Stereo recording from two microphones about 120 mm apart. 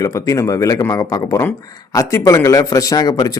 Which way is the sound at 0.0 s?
25° left (ahead or behind).